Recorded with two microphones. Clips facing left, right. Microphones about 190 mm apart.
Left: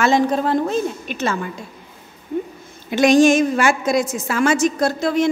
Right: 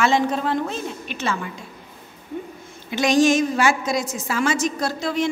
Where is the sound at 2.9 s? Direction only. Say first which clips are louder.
Left 5 dB; 55° left (ahead or behind).